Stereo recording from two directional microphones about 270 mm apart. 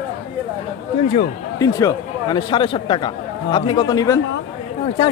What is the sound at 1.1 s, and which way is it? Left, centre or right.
Speech, centre.